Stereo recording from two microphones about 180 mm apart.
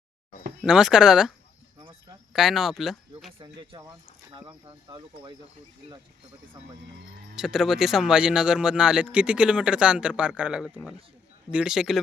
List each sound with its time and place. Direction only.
0.6 s speech: 5° right (ahead or behind)
1.8 s a sound: 30° right (ahead or behind)
2.3 s speech: centre (ahead or behind)
3.4 s speech: 25° right (ahead or behind)
7.3 s speech: 5° right (ahead or behind)